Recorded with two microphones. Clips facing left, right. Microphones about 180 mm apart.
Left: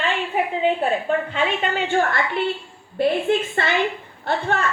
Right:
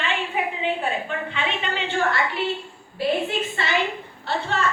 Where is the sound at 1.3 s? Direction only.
45° left (ahead or behind).